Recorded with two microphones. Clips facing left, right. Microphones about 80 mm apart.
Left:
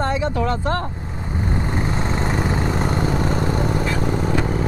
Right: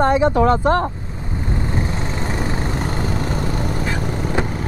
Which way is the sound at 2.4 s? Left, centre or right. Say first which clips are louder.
Left 2 dB; left.